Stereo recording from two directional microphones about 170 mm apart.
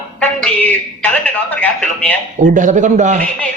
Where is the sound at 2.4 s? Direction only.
50° right (ahead or behind).